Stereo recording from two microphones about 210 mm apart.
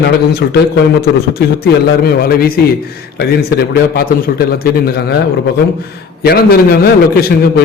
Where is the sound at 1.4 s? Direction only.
50° left (ahead or behind).